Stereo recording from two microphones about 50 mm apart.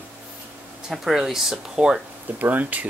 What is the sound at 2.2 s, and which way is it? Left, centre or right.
Speech, right.